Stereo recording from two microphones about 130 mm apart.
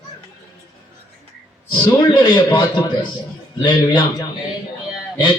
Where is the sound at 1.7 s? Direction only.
35° left (ahead or behind).